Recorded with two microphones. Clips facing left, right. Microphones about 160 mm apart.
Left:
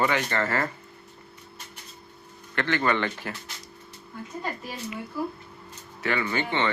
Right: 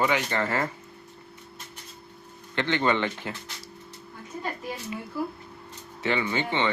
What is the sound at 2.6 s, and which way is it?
Speech, 20° right (ahead or behind).